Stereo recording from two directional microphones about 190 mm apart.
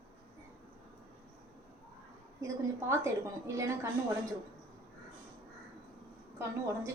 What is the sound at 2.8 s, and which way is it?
Speech, 15° right (ahead or behind).